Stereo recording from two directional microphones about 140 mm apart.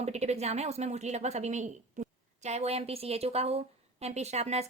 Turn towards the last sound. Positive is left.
turn(degrees=-50)  # may be behind; listen again after turning